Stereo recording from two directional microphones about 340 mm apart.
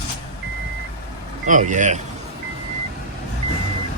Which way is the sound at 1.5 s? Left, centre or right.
Right.